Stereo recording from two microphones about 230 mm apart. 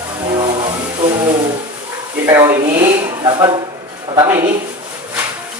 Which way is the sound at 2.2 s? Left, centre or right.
Centre.